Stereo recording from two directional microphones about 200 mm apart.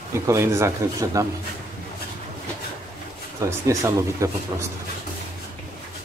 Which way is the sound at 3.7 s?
15° right (ahead or behind).